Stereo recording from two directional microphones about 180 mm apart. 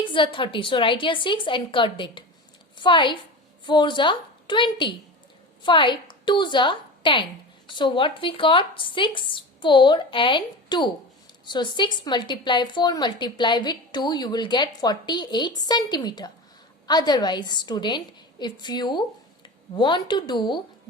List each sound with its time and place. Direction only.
0.0 s a woman's voice: 25° left (ahead or behind)